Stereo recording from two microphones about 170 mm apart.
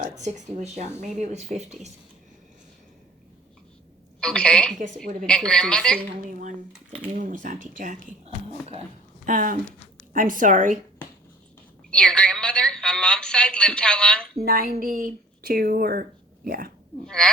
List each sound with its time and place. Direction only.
0.2 s speech: 45° right (ahead or behind)
4.2 s a woman's voice: 5° left (ahead or behind)
7.2 s speech: 50° right (ahead or behind)
9.2 s speech: 50° right (ahead or behind)
11.9 s a woman's voice: 5° left (ahead or behind)
14.3 s speech: 60° right (ahead or behind)
17.1 s a woman's voice: 5° left (ahead or behind)